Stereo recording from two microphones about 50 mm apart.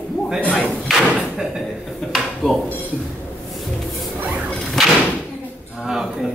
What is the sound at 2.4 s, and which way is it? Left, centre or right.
Speech, centre.